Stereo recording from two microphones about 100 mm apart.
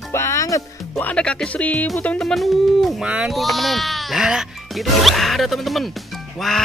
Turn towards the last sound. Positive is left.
turn(degrees=0)  # may be behind; listen again after turning